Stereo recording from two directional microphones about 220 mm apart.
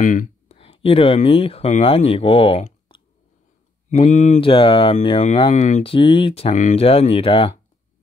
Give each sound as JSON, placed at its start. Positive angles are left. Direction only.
{"t": 0.0, "sound": "speech", "side_deg": 35}